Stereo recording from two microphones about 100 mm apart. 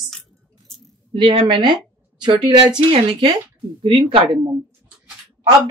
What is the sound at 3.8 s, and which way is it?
Speech, 60° right (ahead or behind).